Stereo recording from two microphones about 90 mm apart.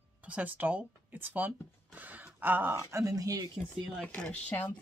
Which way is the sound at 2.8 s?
35° right (ahead or behind).